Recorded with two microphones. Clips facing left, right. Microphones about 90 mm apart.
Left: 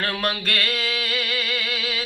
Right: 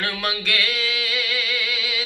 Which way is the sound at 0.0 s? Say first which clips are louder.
Left 1 dB; 45° left (ahead or behind).